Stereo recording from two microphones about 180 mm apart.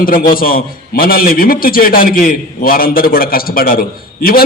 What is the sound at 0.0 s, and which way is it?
A man's voice, 55° left (ahead or behind).